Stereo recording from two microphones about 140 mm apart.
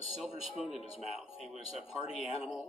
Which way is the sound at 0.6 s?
5° left (ahead or behind).